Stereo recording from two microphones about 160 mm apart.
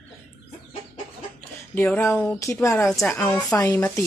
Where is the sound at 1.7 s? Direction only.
10° left (ahead or behind).